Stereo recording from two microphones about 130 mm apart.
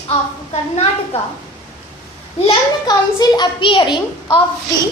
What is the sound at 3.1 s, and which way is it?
Child singing, 30° left (ahead or behind).